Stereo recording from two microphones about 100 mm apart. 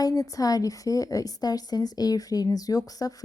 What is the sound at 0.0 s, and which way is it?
A woman's voice, 35° left (ahead or behind).